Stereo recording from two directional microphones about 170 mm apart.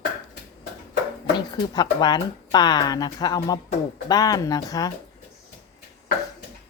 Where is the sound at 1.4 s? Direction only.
25° left (ahead or behind).